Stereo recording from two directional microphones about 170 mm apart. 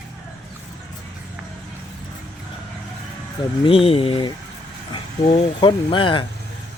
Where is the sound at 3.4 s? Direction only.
30° left (ahead or behind).